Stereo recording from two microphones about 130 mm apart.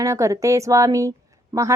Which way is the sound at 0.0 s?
25° right (ahead or behind).